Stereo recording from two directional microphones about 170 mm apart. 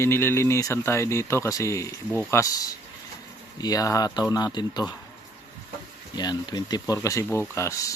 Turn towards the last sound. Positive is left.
turn(degrees=20)  # may be behind; listen again after turning